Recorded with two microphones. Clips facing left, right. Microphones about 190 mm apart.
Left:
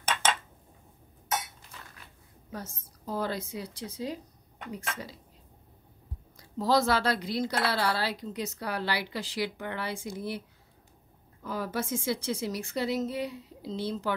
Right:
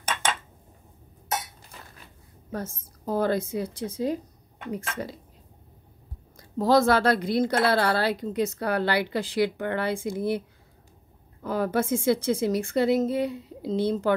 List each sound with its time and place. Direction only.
2.5 s a woman's voice: 50° right (ahead or behind)
6.3 s a woman's voice: 50° right (ahead or behind)
11.4 s a woman's voice: 55° right (ahead or behind)